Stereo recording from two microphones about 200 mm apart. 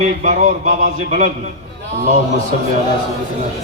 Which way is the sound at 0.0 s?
40° right (ahead or behind).